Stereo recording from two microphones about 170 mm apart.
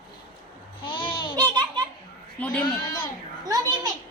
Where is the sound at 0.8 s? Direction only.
30° left (ahead or behind).